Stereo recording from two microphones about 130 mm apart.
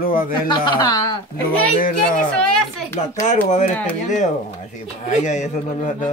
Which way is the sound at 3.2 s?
65° left (ahead or behind).